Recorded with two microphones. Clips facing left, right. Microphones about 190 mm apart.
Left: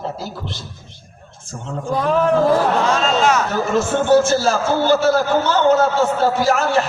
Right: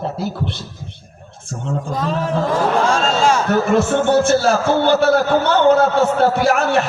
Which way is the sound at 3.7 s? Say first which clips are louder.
Left 2 dB; 60° right (ahead or behind).